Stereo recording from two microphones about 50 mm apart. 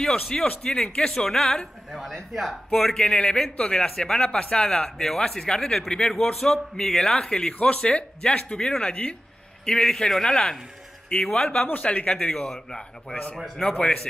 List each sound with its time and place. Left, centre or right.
0.0 s a man's voice: centre
1.9 s a man's voice: centre; by 4.9 s left
4.9 s a man's voice: centre
9.7 s a man's voice: centre
11.6 s a man's voice: left; by 14.0 s centre